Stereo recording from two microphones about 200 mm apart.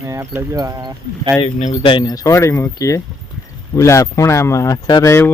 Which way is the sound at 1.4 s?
30° left (ahead or behind).